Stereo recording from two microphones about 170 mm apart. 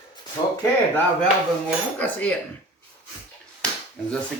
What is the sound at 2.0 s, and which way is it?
Speech, 10° left (ahead or behind).